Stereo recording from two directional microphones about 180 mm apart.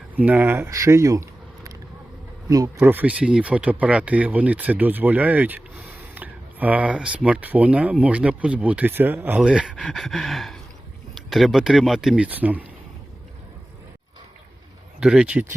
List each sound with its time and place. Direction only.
0.2 s speech: 10° right (ahead or behind)
2.7 s speech: 10° right (ahead or behind)
15.0 s speech: 5° right (ahead or behind)